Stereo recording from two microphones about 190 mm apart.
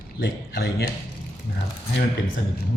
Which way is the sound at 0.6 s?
55° left (ahead or behind).